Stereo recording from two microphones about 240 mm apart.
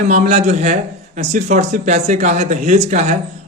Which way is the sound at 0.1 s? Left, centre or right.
Right.